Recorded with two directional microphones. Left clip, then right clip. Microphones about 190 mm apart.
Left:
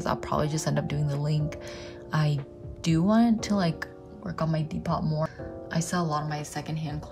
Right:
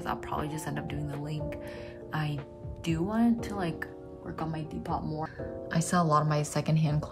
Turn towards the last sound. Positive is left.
turn(degrees=-20)  # may be behind; listen again after turning